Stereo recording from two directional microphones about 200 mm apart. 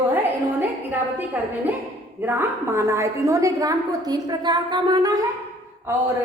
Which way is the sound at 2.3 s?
10° right (ahead or behind).